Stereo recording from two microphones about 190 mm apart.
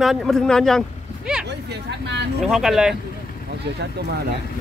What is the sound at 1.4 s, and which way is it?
Hubbub, 60° right (ahead or behind).